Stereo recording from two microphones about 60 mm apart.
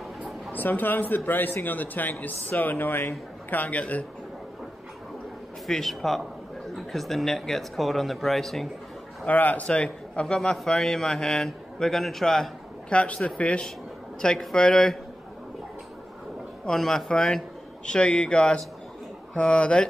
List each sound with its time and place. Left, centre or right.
0.5 s speech: left
5.7 s speech: centre
9.2 s a man's voice: left; by 12.4 s centre
12.9 s a man's voice: left
16.6 s a man's voice: centre